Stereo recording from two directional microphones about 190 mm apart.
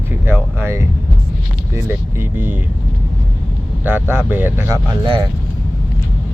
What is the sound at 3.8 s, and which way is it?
Speech, 10° right (ahead or behind).